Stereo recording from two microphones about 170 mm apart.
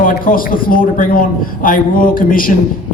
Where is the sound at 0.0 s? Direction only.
55° left (ahead or behind).